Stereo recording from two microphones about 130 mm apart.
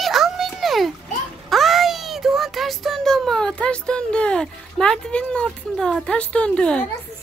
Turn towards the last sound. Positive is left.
turn(degrees=10)  # may be behind; listen again after turning